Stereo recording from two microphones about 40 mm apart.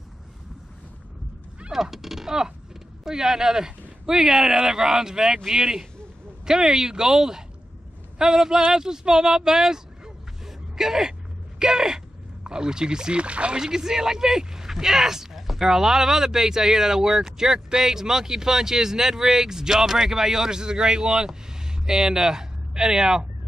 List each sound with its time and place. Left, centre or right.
1.7 s speech: centre; by 13.6 s right
13.6 s speech: centre